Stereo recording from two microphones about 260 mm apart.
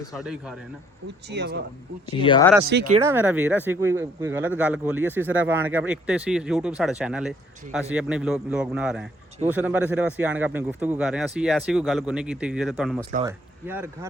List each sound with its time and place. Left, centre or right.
0.2 s speech: centre
1.3 s speech: right
2.0 s speech: centre
2.6 s speech: right
3.0 s speech: centre